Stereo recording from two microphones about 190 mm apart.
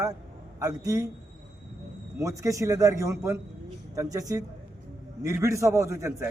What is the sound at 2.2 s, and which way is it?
A man's voice, 15° right (ahead or behind).